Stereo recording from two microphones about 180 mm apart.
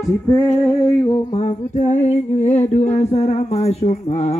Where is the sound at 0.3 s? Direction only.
15° left (ahead or behind).